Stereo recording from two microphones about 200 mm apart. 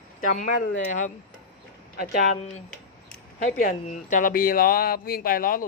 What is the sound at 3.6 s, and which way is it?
Speech, 40° left (ahead or behind).